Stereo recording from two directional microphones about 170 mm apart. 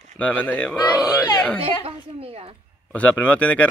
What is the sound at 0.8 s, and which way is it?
Speech, 20° left (ahead or behind).